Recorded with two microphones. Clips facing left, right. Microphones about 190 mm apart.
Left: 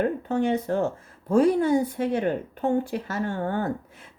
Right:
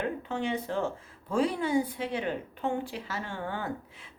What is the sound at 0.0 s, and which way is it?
Speech, 45° left (ahead or behind).